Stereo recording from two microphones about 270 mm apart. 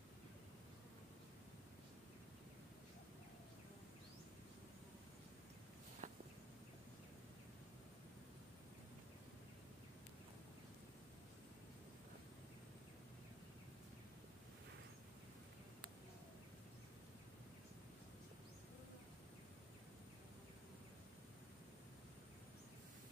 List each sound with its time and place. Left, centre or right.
6.0 s walk: right